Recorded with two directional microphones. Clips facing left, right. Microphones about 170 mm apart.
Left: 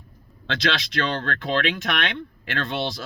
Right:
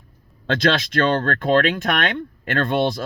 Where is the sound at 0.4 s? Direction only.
50° right (ahead or behind).